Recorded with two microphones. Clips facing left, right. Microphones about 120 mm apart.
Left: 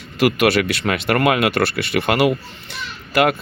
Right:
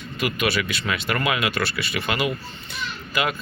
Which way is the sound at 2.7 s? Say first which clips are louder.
Left 7 dB; 65° left (ahead or behind).